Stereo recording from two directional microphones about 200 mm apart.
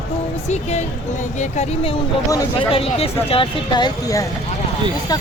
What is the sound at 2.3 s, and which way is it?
Speech, 15° left (ahead or behind).